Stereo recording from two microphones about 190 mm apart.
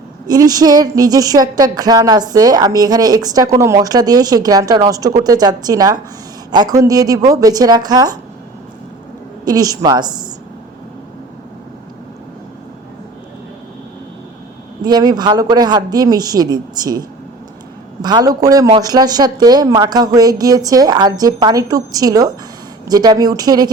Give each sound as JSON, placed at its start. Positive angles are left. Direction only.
{"t": 0.3, "sound": "speech", "side_deg": -20}
{"t": 9.4, "sound": "speech", "side_deg": -20}
{"t": 14.8, "sound": "speech", "side_deg": -20}